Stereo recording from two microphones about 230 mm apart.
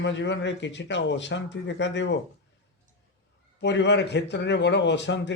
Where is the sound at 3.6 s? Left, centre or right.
Left.